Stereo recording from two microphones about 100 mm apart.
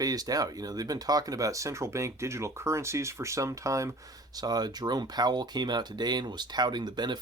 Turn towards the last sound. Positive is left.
turn(degrees=-45)  # may be behind; listen again after turning